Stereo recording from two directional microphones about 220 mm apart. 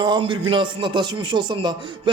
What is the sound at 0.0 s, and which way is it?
Speech, 20° right (ahead or behind).